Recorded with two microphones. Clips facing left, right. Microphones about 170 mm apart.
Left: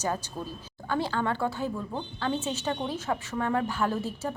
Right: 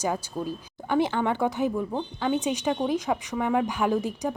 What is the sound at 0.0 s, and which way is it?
A woman's voice, 10° right (ahead or behind).